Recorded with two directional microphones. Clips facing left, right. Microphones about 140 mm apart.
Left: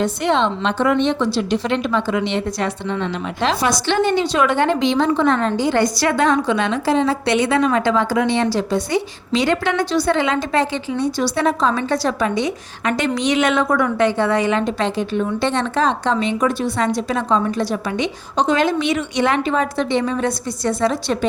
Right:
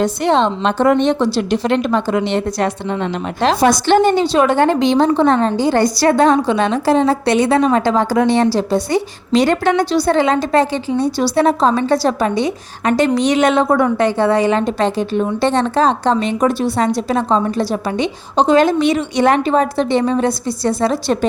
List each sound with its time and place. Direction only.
0.0 s a woman's voice: 35° right (ahead or behind)